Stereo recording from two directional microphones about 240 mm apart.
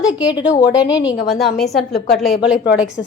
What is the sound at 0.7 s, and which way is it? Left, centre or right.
Speech, centre.